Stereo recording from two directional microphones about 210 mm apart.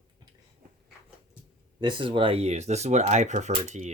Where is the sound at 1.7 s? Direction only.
20° right (ahead or behind).